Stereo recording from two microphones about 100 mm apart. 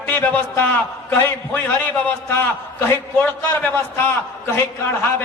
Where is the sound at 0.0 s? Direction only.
20° left (ahead or behind).